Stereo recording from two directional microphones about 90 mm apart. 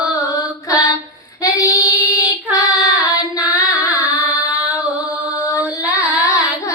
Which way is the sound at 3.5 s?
40° left (ahead or behind).